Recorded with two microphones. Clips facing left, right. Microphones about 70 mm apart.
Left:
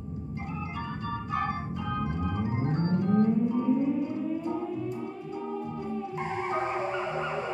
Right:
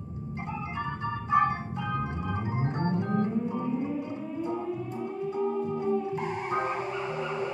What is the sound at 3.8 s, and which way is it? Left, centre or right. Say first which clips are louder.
Music: left 4 dB; right.